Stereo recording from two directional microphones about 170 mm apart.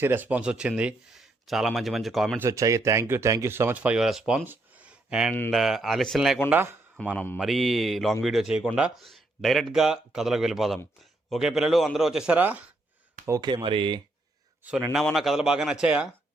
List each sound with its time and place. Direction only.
0.0 s speech: 10° right (ahead or behind)
2.4 s speech: 20° right (ahead or behind)
5.3 s speech: 5° left (ahead or behind)
6.5 s speech: 10° right (ahead or behind)
7.0 s speech: 5° left (ahead or behind); by 12.7 s 10° right (ahead or behind)
13.2 s speech: 20° right (ahead or behind)
14.6 s a man's voice: 10° right (ahead or behind)